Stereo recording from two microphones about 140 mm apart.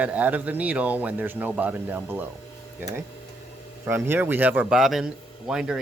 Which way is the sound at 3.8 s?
15° right (ahead or behind).